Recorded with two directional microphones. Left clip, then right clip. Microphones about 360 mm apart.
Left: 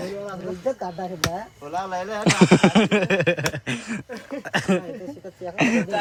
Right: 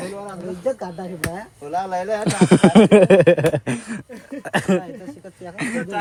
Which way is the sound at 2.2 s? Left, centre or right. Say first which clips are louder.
Even; centre.